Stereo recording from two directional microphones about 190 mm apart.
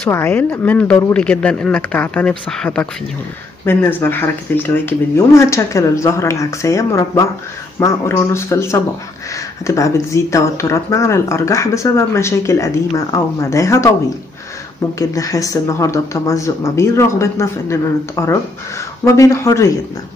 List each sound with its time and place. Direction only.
0.0 s speech: 10° left (ahead or behind)
15.0 s speech: 15° left (ahead or behind)